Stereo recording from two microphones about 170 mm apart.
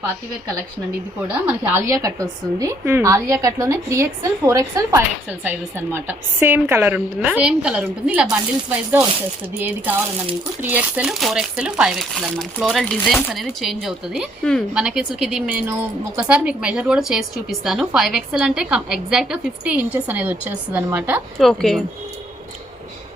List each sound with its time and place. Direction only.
1.3 s a woman's voice: 10° right (ahead or behind)
1.9 s a woman's voice: 20° right (ahead or behind)
9.6 s a woman's voice: 10° right (ahead or behind)
21.3 s a woman's voice: centre (ahead or behind)